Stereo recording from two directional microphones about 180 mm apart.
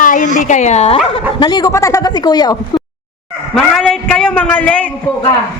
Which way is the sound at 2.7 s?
25° left (ahead or behind).